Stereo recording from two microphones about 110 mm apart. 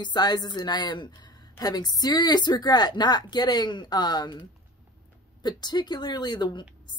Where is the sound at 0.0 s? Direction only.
40° left (ahead or behind).